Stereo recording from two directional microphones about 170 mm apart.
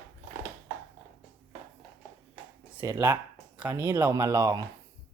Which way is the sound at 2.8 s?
15° right (ahead or behind).